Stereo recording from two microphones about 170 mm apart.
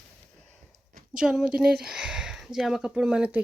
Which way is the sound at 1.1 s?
5° right (ahead or behind).